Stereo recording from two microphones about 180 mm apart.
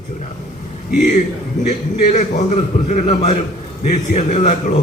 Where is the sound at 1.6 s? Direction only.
40° left (ahead or behind).